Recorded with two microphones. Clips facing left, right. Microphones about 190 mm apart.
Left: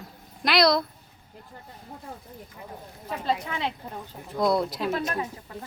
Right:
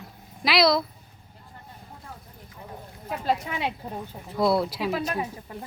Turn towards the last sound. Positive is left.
turn(degrees=-15)  # may be behind; listen again after turning